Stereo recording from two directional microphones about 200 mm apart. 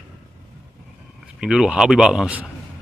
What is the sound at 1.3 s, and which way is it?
A man's voice, 5° right (ahead or behind).